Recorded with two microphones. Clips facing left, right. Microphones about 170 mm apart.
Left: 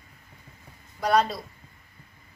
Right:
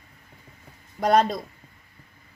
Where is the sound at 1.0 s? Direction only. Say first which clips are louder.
Right 3 dB; 45° right (ahead or behind).